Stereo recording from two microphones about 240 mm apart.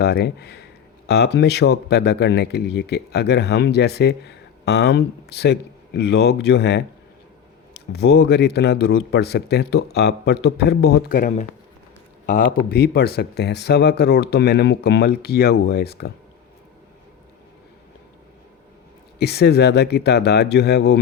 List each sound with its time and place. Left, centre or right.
0.0 s speech: left
7.9 s speech: left
19.2 s speech: left